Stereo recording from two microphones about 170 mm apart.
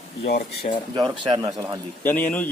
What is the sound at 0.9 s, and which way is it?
Speech, 25° right (ahead or behind).